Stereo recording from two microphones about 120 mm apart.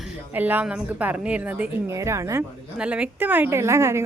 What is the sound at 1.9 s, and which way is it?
Speech, 25° right (ahead or behind).